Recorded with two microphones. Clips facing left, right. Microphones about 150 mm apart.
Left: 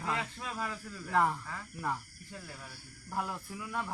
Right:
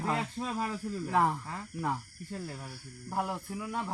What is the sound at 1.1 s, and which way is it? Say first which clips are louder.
Speech: right 1 dB; 20° right (ahead or behind).